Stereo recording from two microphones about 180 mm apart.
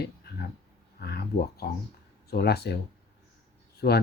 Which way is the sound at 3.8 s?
60° left (ahead or behind).